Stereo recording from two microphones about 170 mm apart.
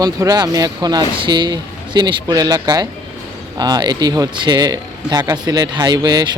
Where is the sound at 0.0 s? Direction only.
20° right (ahead or behind).